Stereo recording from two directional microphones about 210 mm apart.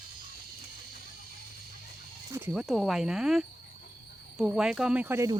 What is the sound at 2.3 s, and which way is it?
Speech, 5° right (ahead or behind).